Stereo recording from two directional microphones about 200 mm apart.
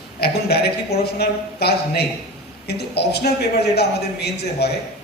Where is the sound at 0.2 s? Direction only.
50° left (ahead or behind).